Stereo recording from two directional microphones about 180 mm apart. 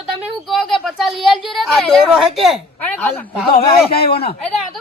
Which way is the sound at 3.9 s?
60° left (ahead or behind).